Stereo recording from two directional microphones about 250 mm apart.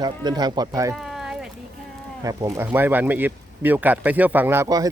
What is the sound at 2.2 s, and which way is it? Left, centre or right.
Speech, centre.